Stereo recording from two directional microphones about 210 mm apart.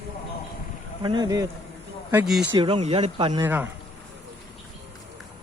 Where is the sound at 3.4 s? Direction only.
10° right (ahead or behind).